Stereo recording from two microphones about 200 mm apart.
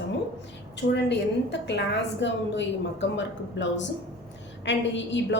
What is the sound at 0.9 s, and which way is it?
A woman's voice, 60° left (ahead or behind).